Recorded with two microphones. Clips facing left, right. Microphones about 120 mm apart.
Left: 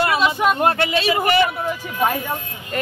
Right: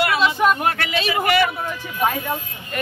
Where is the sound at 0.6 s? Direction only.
30° left (ahead or behind).